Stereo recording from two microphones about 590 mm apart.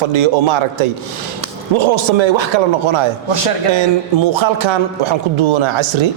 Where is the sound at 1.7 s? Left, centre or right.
Right.